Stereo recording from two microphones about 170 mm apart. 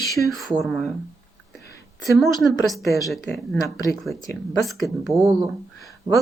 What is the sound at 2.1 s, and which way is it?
Speech, centre (ahead or behind).